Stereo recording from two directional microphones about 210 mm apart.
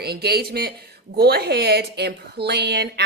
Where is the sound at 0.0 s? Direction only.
50° right (ahead or behind).